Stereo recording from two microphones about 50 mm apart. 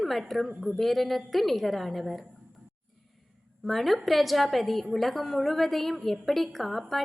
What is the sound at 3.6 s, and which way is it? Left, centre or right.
A woman's voice, centre.